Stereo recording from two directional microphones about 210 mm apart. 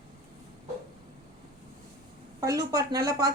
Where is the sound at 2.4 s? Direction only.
15° right (ahead or behind).